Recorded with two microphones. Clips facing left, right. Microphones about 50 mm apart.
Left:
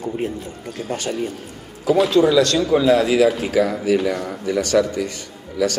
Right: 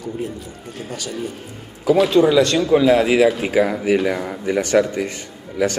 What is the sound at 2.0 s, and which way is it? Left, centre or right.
A man's voice, right.